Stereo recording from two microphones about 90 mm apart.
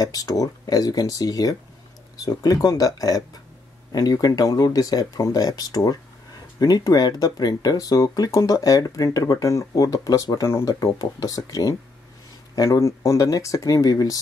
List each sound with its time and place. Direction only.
0.0 s speech: 45° left (ahead or behind)